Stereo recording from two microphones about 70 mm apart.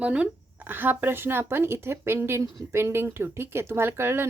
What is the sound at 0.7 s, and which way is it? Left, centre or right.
Speech, right.